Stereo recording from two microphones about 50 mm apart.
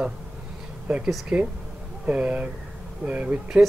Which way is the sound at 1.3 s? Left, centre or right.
Centre.